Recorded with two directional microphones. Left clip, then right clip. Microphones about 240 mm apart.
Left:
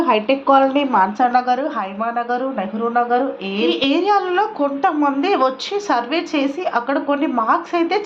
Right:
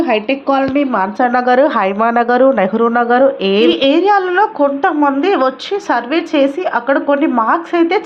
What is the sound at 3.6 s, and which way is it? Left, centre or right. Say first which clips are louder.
A woman's voice: right 3 dB; centre.